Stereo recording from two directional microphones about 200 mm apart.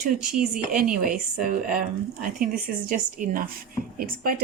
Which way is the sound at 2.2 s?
45° right (ahead or behind).